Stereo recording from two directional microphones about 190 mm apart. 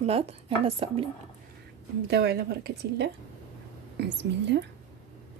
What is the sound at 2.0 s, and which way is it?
A woman's voice, 60° right (ahead or behind).